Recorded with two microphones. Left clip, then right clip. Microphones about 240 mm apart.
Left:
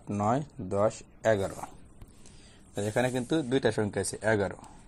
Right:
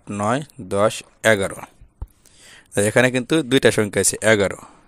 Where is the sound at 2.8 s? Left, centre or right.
Right.